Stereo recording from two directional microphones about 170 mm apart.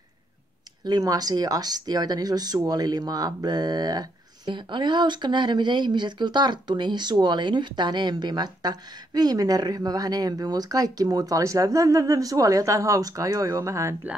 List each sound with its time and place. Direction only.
0.8 s speech: 20° right (ahead or behind)